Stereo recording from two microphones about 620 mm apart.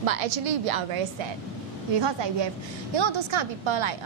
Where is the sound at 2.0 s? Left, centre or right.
Right.